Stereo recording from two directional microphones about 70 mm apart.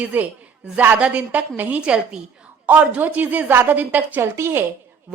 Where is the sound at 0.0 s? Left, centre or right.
Right.